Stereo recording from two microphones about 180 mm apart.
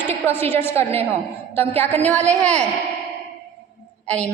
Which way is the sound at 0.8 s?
35° right (ahead or behind).